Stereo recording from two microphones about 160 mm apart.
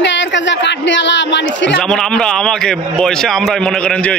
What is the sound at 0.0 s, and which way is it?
Speech, 90° left.